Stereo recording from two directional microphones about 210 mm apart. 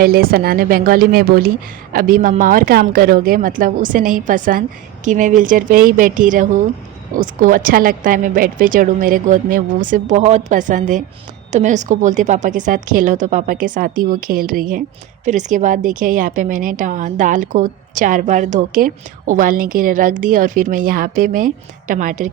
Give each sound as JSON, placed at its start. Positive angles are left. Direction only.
{"t": 0.0, "sound": "a woman's voice", "side_deg": -45}